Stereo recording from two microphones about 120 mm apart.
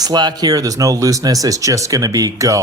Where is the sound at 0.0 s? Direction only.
35° right (ahead or behind).